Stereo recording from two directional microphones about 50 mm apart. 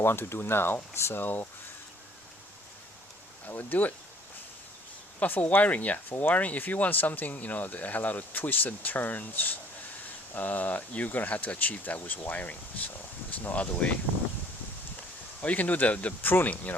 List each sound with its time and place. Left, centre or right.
0.0 s speech: left
1.1 s speech: left
3.4 s speech: left
5.2 s speech: left
15.4 s speech: left
16.2 s speech: left